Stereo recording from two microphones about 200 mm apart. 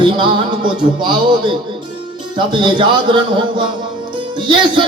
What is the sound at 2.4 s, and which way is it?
Music, 25° right (ahead or behind).